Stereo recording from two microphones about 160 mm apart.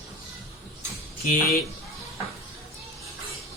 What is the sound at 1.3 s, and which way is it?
Speech, 65° left (ahead or behind).